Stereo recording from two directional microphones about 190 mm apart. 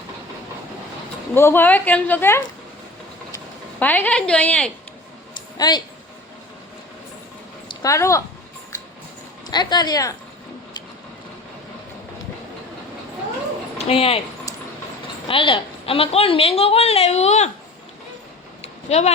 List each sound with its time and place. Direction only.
1.3 s speech: 10° left (ahead or behind)
5.5 s speech: 20° left (ahead or behind)
7.7 s a woman's voice: 20° left (ahead or behind)
9.5 s speech: 20° left (ahead or behind)
13.7 s speech: 30° left (ahead or behind)
15.3 s a woman's voice: 25° left (ahead or behind)
18.6 s a sound: 35° left (ahead or behind)